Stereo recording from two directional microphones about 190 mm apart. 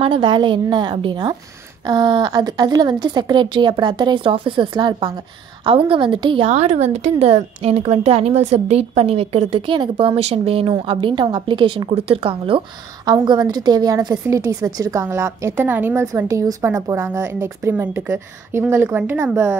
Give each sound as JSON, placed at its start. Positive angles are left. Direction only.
{"t": 0.0, "sound": "a woman's voice", "side_deg": -25}